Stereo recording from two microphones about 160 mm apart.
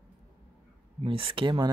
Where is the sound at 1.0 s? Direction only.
35° right (ahead or behind).